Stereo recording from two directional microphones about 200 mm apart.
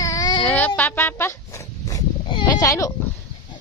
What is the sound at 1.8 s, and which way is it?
Sheep, 20° left (ahead or behind).